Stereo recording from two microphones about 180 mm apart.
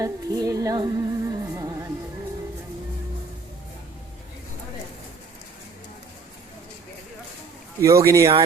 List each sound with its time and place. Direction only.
0.0 s music: 20° right (ahead or behind)
7.8 s speech: 15° right (ahead or behind)